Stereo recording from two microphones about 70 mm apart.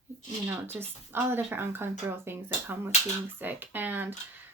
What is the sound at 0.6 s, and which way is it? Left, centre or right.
Speech, right.